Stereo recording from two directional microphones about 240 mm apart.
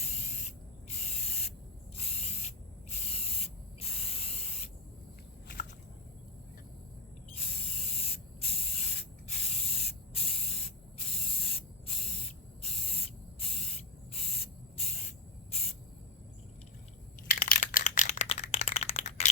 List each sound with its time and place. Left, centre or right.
0.0 s spray: left
7.3 s spray: left
17.4 s a sound: left